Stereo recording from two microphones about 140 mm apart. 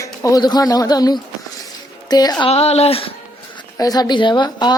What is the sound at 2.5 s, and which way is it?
Speech, 50° left (ahead or behind).